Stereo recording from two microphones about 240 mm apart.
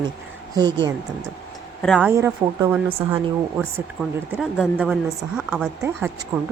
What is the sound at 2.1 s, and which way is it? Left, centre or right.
A woman's voice, centre.